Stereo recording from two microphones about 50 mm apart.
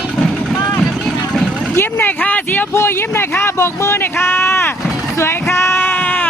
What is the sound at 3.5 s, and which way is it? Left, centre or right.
Speech, left.